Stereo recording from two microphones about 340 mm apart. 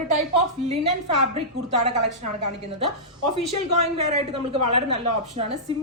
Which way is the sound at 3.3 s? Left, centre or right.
Centre.